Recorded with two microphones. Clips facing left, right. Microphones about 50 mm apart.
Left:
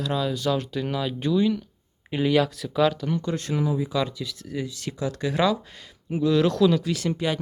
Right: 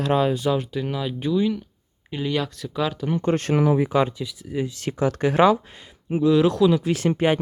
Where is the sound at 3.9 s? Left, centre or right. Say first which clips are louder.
Right 5 dB; right.